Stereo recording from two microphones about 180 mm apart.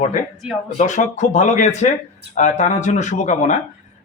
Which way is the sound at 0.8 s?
40° left (ahead or behind).